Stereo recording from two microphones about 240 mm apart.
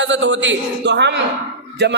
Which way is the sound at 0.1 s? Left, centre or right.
Right.